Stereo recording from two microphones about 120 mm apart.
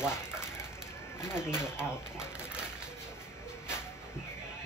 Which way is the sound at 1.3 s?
5° right (ahead or behind).